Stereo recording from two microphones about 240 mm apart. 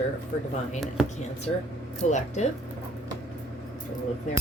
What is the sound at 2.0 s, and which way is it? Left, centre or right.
Speech, left.